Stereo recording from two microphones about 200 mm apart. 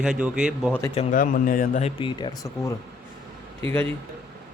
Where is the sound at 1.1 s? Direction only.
40° left (ahead or behind).